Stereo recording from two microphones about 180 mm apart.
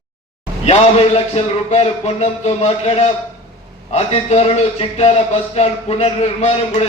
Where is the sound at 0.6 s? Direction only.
35° left (ahead or behind).